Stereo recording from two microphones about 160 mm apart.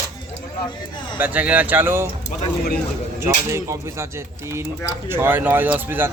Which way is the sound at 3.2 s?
20° right (ahead or behind).